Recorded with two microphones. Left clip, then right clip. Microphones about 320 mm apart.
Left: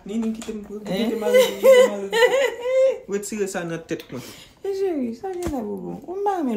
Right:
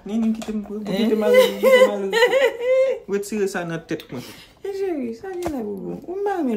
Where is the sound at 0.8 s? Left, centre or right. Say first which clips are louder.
Right 4 dB; centre.